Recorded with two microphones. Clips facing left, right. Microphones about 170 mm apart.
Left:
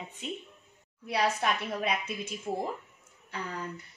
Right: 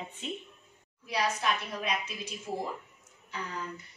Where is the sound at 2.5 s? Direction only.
30° left (ahead or behind).